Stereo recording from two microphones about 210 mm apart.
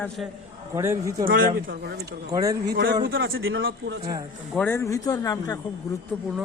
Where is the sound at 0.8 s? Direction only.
10° right (ahead or behind).